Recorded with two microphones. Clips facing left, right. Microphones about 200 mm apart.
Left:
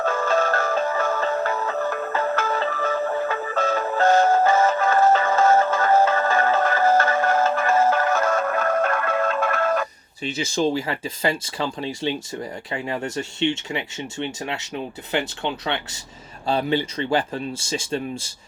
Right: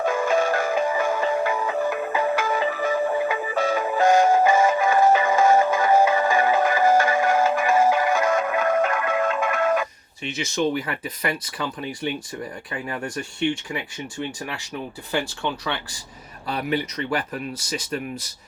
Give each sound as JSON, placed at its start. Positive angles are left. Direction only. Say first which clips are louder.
{"t": 0.0, "sound": "music", "louder": "right 1 dB", "side_deg": -15}
{"t": 10.2, "sound": "speech", "louder": "left 2 dB", "side_deg": 30}